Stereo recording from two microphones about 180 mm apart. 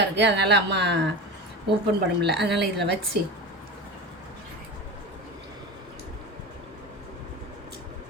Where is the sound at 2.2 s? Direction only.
70° right (ahead or behind).